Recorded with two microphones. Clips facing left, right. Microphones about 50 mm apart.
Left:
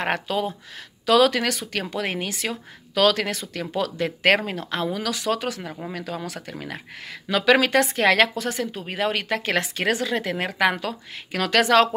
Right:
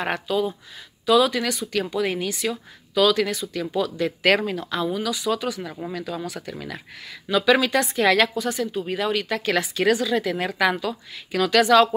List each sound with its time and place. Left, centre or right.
0.0 s speech: left
1.0 s speech: left
1.8 s speech: left
4.0 s a woman's voice: left
4.9 s speech: left
5.6 s speech: left
5.9 s speech: left
7.2 s speech: left
8.4 s a woman's voice: left